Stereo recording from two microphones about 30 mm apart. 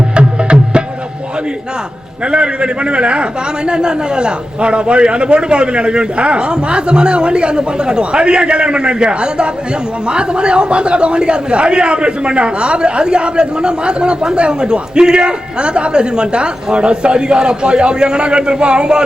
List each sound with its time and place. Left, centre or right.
0.2 s music: right
2.3 s a man's voice: right